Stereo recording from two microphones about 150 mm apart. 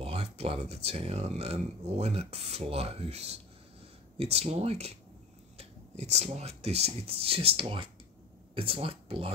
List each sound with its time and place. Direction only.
0.0 s speech: 45° right (ahead or behind)